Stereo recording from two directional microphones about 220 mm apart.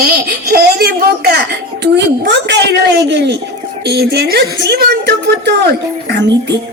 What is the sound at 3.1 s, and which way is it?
A child's voice, 50° right (ahead or behind).